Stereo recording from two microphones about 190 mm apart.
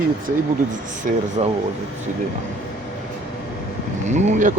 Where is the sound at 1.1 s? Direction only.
45° right (ahead or behind).